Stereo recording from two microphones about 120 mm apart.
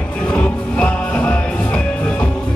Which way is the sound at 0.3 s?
10° left (ahead or behind).